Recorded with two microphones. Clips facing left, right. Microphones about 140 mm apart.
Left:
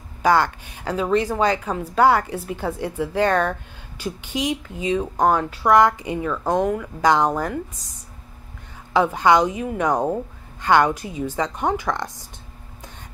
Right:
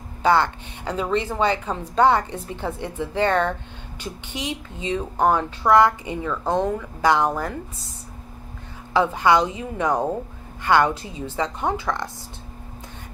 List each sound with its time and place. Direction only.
0.2 s a woman's voice: 10° left (ahead or behind)
8.9 s a woman's voice: 15° left (ahead or behind)